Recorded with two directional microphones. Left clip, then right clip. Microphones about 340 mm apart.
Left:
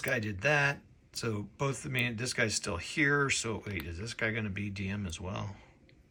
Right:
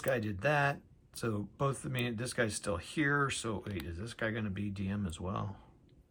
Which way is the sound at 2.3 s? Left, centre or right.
Centre.